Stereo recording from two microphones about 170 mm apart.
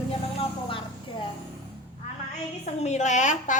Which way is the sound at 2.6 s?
40° left (ahead or behind).